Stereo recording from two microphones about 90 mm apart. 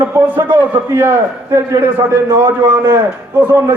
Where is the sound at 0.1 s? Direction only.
20° right (ahead or behind).